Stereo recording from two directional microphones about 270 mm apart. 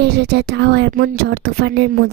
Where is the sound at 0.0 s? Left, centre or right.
Right.